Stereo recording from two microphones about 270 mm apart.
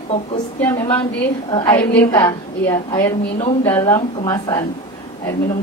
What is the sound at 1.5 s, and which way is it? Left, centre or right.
A woman's voice, centre.